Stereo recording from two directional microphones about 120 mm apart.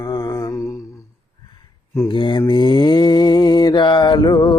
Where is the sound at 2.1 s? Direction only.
40° left (ahead or behind).